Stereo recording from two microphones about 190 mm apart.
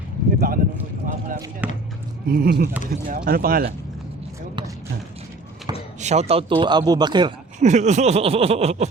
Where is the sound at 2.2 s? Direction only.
55° right (ahead or behind).